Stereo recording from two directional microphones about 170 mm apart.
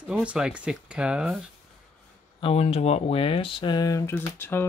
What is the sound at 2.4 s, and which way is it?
Speech, 35° left (ahead or behind).